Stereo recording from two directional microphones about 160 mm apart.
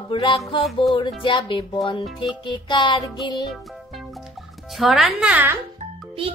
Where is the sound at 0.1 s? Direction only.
30° left (ahead or behind).